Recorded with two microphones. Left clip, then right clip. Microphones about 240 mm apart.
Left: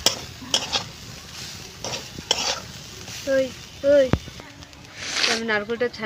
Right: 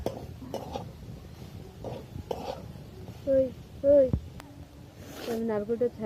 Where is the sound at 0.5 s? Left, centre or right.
Left.